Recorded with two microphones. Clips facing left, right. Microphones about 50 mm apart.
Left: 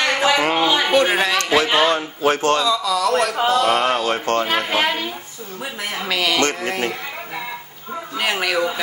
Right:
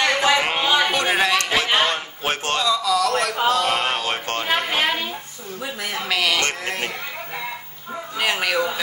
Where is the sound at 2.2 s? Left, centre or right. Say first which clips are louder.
Left 8 dB; right.